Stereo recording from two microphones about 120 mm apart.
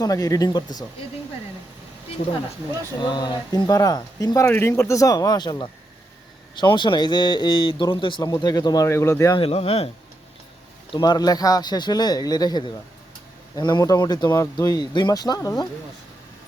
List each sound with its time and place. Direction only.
0.0 s speech: 30° left (ahead or behind)
3.0 s speech: 40° left (ahead or behind)
9.4 s speech: 55° left (ahead or behind)
10.9 s speech: 40° left (ahead or behind)